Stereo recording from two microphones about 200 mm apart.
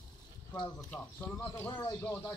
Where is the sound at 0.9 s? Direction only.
10° left (ahead or behind).